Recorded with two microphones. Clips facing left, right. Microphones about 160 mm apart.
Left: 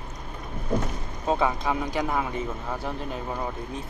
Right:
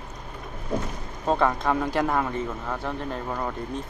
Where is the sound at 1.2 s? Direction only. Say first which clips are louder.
Right 2 dB; 5° left (ahead or behind).